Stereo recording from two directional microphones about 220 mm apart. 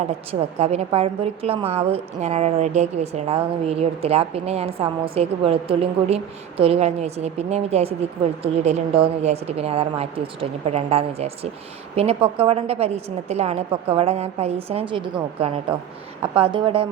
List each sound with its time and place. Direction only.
0.3 s a woman's voice: 30° right (ahead or behind)